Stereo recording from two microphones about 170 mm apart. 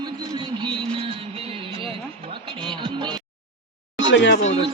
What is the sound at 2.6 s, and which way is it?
Music, 25° right (ahead or behind).